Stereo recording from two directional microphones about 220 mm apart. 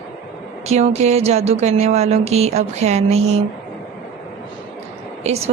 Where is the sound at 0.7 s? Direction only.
30° right (ahead or behind).